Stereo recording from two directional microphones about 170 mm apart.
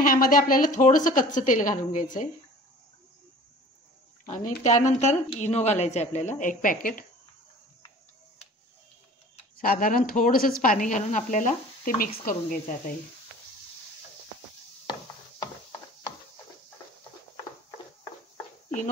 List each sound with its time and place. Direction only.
0.0 s a woman's voice: 55° left (ahead or behind)
4.3 s a woman's voice: 45° left (ahead or behind)
9.6 s a woman's voice: 55° left (ahead or behind)